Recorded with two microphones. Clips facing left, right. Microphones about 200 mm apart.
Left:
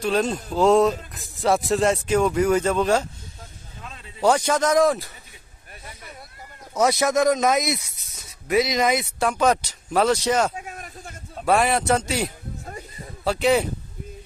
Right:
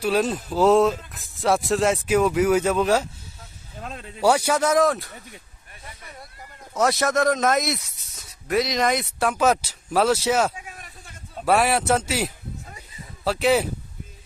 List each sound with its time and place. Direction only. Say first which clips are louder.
0.0 s speech: even; 5° right (ahead or behind)
3.8 s a sound: right 6 dB; 55° right (ahead or behind)
4.2 s speech: even; 10° right (ahead or behind)
6.7 s speech: left 1 dB; centre (ahead or behind)
10.5 s a sound: left 5 dB; 45° left (ahead or behind)
11.4 s speech: even; 5° right (ahead or behind)